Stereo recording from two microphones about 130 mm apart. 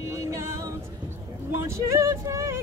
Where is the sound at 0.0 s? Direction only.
25° right (ahead or behind).